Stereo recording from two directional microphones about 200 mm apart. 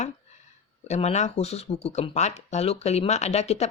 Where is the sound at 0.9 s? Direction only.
35° left (ahead or behind).